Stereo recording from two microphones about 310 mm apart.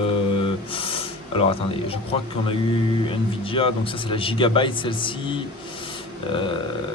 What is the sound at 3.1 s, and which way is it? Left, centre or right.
A man's voice, centre.